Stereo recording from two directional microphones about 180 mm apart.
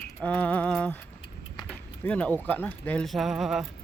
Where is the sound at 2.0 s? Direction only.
5° left (ahead or behind).